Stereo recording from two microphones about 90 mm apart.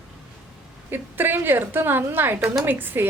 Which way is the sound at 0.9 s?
25° right (ahead or behind).